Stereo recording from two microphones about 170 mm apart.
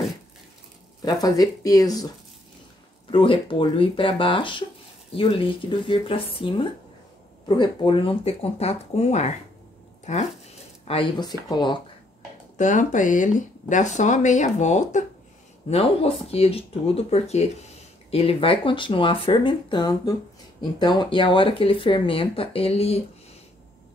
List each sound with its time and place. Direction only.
1.0 s speech: 20° left (ahead or behind); by 9.3 s 40° left (ahead or behind)
10.0 s zipper: 40° left (ahead or behind)
11.1 s speech: 25° left (ahead or behind)
12.5 s speech: 45° left (ahead or behind)